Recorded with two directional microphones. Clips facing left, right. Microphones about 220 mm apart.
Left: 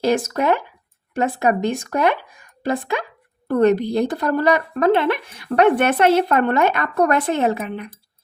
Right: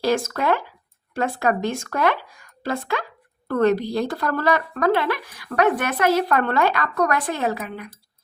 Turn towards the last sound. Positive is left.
turn(degrees=25)  # may be behind; listen again after turning